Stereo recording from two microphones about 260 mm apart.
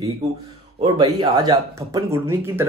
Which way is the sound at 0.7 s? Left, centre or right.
Centre.